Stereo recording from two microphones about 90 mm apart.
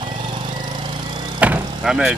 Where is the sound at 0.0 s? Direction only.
60° right (ahead or behind).